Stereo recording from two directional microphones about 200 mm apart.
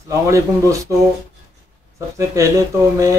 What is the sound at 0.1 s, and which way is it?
Speech, 15° right (ahead or behind).